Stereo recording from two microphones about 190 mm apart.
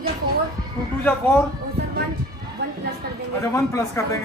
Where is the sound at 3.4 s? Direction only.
15° left (ahead or behind).